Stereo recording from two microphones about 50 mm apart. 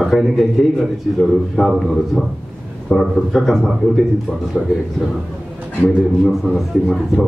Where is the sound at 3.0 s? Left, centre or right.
Centre.